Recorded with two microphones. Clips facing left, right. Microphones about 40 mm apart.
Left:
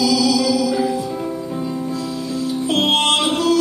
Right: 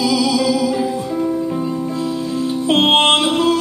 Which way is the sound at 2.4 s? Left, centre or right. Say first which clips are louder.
Right 3 dB; right.